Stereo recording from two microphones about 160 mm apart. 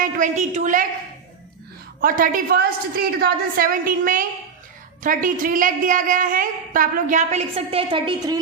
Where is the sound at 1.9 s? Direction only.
60° right (ahead or behind).